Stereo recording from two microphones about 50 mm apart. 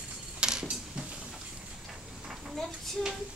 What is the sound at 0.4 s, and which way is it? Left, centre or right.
Mechanisms, centre.